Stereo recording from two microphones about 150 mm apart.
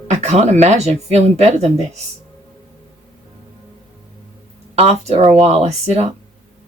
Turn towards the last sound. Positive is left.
turn(degrees=-45)  # may be behind; listen again after turning